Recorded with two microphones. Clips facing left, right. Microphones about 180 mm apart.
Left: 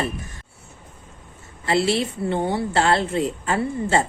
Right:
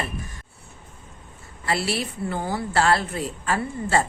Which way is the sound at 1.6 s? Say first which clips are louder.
Left 5 dB; 25° left (ahead or behind).